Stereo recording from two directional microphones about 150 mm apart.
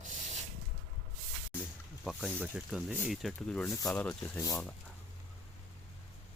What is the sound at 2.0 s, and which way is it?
Speech, 5° right (ahead or behind).